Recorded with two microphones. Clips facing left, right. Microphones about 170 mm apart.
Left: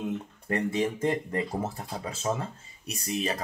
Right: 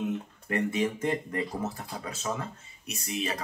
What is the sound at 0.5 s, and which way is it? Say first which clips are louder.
Speech: left 1 dB; 30° left (ahead or behind).